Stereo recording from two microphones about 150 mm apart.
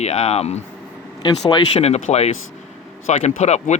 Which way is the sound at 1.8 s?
45° left (ahead or behind).